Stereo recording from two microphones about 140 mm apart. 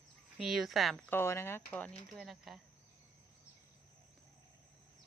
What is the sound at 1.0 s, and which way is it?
Speech, 15° left (ahead or behind).